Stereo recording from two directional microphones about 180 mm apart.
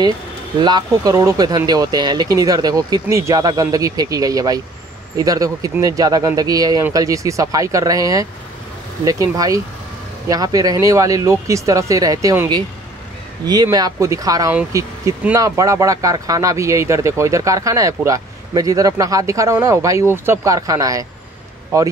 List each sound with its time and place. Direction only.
0.6 s speech: 25° right (ahead or behind)